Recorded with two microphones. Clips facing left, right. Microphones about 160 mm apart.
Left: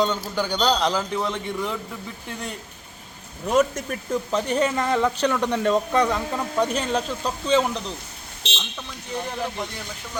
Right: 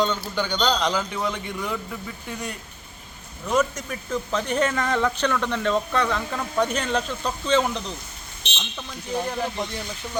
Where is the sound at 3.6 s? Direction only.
50° left (ahead or behind).